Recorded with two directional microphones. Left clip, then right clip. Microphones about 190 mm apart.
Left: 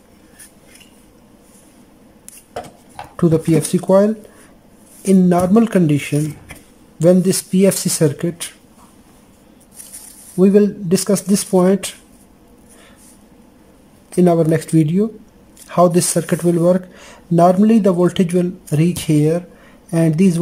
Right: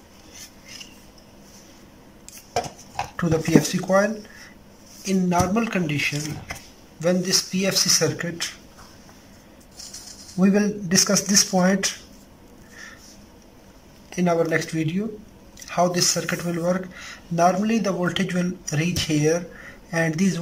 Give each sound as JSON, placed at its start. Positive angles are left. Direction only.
{"t": 3.2, "sound": "speech", "side_deg": 25}
{"t": 10.4, "sound": "speech", "side_deg": 20}
{"t": 14.1, "sound": "speech", "side_deg": 30}